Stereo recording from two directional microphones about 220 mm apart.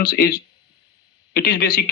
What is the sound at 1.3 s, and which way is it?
Speech, 45° left (ahead or behind).